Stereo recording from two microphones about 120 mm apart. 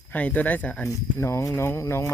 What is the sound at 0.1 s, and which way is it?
Speech, 10° left (ahead or behind).